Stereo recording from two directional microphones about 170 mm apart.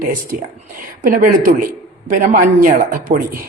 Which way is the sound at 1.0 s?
55° right (ahead or behind).